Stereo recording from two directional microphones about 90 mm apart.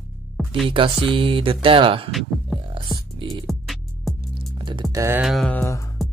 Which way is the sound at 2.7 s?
65° right (ahead or behind).